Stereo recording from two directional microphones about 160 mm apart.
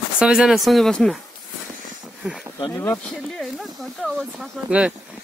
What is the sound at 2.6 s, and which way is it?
Speech, 15° left (ahead or behind).